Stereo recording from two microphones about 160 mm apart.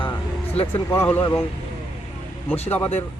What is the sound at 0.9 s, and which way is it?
Speech, 15° left (ahead or behind).